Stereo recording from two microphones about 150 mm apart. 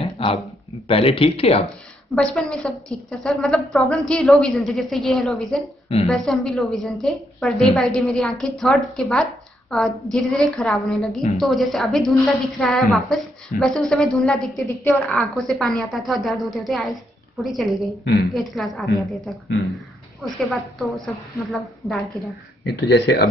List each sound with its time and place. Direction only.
0.0 s a sound: 40° left (ahead or behind)
0.8 s speech: 40° left (ahead or behind)
2.1 s a woman's voice: 5° left (ahead or behind)
20.3 s a woman's voice: centre (ahead or behind)
22.7 s speech: 90° left